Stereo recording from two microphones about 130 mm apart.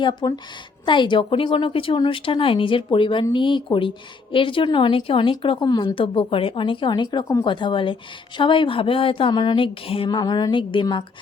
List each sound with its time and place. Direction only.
0.0 s a woman's voice: 35° left (ahead or behind)